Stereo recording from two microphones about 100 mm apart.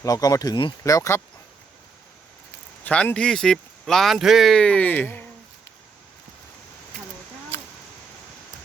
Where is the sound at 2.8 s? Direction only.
15° left (ahead or behind).